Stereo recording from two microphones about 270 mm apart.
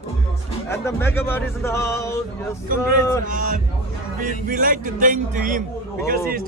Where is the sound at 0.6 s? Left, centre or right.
Centre.